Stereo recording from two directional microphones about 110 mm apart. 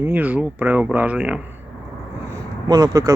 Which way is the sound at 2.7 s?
35° right (ahead or behind).